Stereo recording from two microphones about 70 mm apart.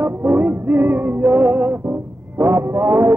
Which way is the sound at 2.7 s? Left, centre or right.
Right.